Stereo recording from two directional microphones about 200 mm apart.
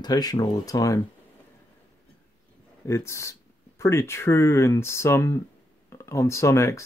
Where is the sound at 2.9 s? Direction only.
15° left (ahead or behind).